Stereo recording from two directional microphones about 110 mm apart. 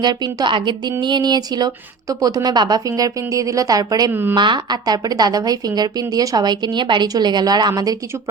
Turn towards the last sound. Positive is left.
turn(degrees=-35)  # may be behind; listen again after turning